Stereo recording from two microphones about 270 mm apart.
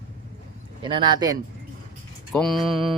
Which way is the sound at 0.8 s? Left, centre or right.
Centre.